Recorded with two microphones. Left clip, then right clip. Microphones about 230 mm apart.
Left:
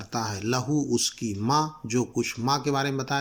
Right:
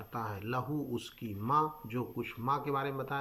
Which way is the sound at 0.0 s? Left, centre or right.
Left.